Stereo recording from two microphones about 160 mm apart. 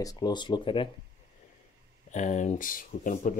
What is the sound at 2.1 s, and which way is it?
Speech, 50° left (ahead or behind).